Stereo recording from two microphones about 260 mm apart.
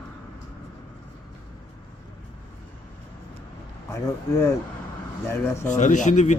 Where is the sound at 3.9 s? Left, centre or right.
Centre.